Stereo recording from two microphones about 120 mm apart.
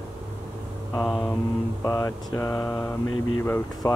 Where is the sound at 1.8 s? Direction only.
25° left (ahead or behind).